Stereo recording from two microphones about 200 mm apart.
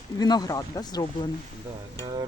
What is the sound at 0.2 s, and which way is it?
Speech, 20° left (ahead or behind).